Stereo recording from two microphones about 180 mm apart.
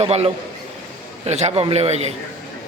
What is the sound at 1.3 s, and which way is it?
Speech, 35° right (ahead or behind).